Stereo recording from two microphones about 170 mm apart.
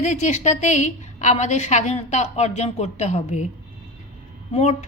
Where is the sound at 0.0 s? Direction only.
45° left (ahead or behind).